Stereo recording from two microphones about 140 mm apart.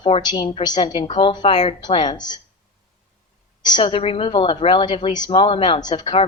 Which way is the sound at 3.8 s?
45° left (ahead or behind).